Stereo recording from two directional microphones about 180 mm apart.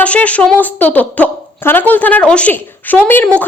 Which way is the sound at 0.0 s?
5° left (ahead or behind).